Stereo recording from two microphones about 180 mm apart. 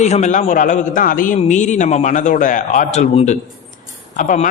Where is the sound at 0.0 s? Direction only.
40° left (ahead or behind).